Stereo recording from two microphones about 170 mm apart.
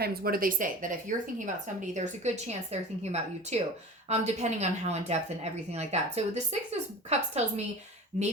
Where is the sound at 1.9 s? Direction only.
40° right (ahead or behind).